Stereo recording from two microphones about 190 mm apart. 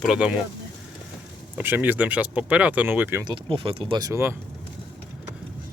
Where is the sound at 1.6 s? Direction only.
10° right (ahead or behind).